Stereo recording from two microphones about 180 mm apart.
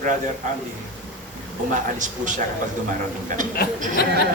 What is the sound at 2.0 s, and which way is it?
Speech, 45° right (ahead or behind).